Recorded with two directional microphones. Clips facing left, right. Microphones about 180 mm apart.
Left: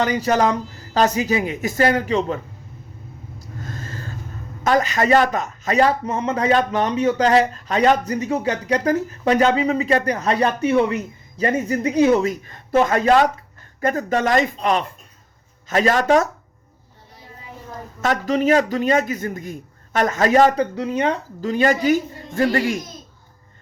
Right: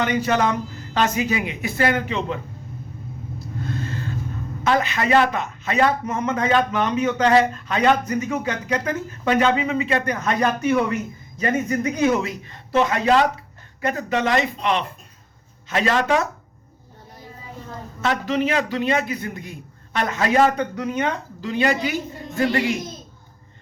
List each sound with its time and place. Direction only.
0.0 s speech: 35° left (ahead or behind)
3.6 s a sound: 40° left (ahead or behind)
4.6 s speech: 40° left (ahead or behind)
12.3 s a man's voice: 45° left (ahead or behind)
18.0 s a man's voice: 45° left (ahead or behind)
21.4 s a man's voice: 45° left (ahead or behind)